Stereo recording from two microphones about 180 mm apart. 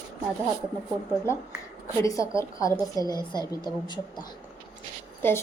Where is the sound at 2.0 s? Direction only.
15° left (ahead or behind).